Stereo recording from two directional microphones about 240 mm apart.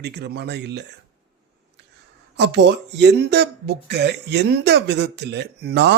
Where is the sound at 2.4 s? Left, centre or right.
Right.